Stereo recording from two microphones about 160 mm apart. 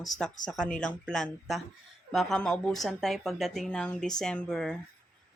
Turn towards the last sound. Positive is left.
turn(degrees=5)  # may be behind; listen again after turning